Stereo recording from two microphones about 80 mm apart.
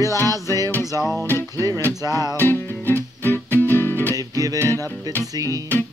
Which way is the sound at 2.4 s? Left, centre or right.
Left.